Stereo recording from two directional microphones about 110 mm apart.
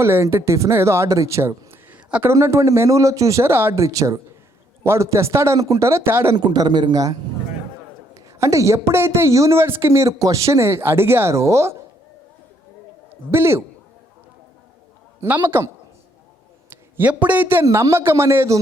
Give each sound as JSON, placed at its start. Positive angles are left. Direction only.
{"t": 0.0, "sound": "speech", "side_deg": -20}
{"t": 6.3, "sound": "a man's voice", "side_deg": -40}
{"t": 13.3, "sound": "speech", "side_deg": -25}
{"t": 15.2, "sound": "speech", "side_deg": -20}